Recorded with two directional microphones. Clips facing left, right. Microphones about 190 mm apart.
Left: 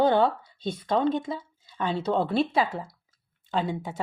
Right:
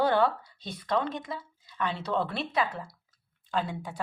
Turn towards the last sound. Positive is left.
turn(degrees=25)  # may be behind; listen again after turning